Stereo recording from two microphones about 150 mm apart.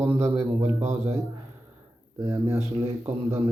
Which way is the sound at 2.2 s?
20° right (ahead or behind).